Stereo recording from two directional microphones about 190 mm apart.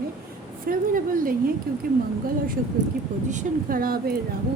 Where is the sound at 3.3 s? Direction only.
45° right (ahead or behind).